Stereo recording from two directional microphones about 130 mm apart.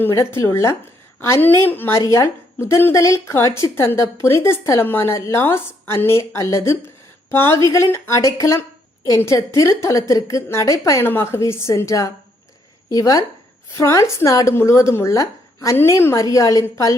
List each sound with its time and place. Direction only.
0.0 s a woman's voice: 20° left (ahead or behind)